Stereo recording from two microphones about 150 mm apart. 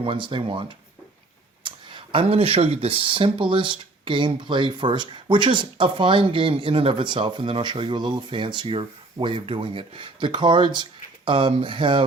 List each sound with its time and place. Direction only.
0.0 s speech: 35° right (ahead or behind)
1.6 s speech: 35° right (ahead or behind)